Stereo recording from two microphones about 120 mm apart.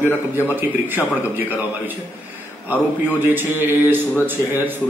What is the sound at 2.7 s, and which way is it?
A man's voice, 15° right (ahead or behind).